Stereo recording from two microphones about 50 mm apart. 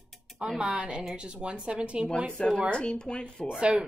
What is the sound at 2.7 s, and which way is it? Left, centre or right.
Speech, centre.